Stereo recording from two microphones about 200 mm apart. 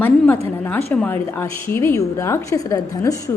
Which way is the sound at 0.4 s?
10° left (ahead or behind).